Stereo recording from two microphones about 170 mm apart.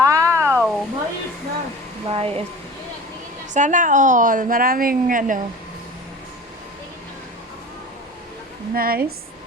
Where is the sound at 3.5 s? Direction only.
45° right (ahead or behind).